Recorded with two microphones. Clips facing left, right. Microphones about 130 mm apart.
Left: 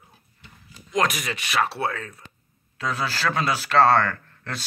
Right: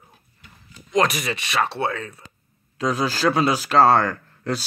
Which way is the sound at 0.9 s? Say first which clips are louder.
Right 3 dB; centre (ahead or behind).